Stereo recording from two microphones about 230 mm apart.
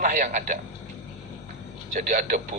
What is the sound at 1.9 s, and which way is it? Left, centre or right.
Speech, right.